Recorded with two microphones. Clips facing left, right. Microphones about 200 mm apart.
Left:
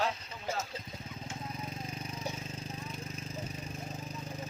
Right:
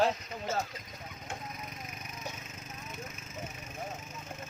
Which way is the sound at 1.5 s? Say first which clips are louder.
Left 4 dB; 30° left (ahead or behind).